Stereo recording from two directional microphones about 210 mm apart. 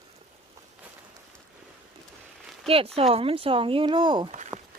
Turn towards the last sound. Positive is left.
turn(degrees=-25)  # may be behind; listen again after turning